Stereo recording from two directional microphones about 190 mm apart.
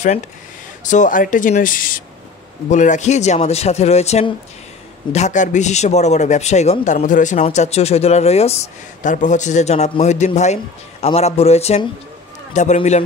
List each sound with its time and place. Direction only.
0.8 s speech: 40° left (ahead or behind)